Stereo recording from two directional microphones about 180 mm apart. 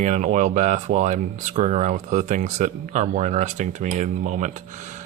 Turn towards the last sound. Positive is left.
turn(degrees=-40)  # may be behind; listen again after turning